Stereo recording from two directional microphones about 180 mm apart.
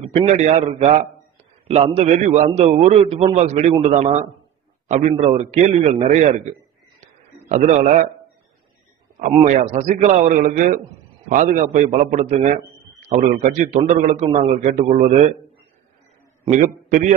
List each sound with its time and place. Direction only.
0.0 s a man's voice: 35° right (ahead or behind)
5.1 s a man's voice: 30° right (ahead or behind)
7.0 s a sound: 40° right (ahead or behind)
9.3 s a man's voice: 40° right (ahead or behind)
16.4 s a man's voice: 45° right (ahead or behind)